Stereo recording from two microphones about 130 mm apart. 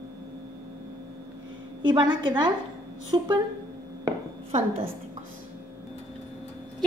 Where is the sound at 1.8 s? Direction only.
40° right (ahead or behind).